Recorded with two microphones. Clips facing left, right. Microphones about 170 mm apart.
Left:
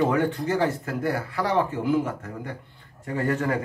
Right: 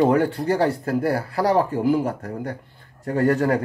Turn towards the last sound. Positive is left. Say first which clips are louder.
# right 6 dB
turn(degrees=-40)  # may be behind; listen again after turning